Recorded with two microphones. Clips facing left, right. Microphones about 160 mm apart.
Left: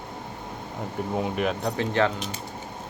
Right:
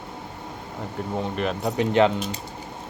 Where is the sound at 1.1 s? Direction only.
5° left (ahead or behind).